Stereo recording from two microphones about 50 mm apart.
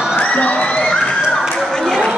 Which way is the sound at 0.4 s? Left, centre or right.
Left.